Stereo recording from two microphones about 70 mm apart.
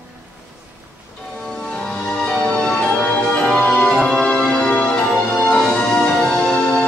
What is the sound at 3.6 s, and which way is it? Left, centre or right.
Music, centre.